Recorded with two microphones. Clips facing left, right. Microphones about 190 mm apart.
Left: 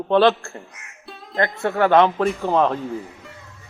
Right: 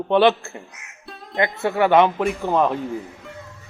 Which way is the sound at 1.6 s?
5° right (ahead or behind).